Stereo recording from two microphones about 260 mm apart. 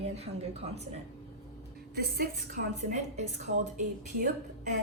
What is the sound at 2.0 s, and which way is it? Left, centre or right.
Speech, right.